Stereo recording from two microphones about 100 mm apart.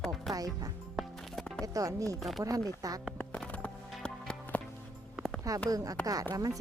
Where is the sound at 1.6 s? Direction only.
35° right (ahead or behind).